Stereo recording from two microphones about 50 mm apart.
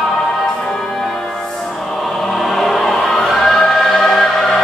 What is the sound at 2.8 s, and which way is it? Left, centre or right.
Choir, centre.